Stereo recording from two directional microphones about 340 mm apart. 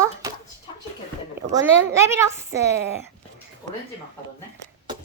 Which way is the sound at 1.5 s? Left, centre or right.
Centre.